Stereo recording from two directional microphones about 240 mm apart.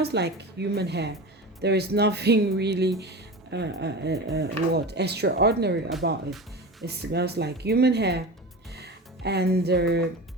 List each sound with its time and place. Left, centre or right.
0.0 s speech: right
8.7 s music: right